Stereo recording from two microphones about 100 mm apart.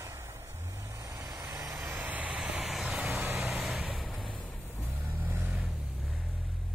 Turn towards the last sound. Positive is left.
turn(degrees=-15)  # may be behind; listen again after turning